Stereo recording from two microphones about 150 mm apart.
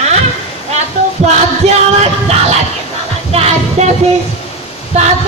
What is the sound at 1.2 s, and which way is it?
Speech, 50° right (ahead or behind).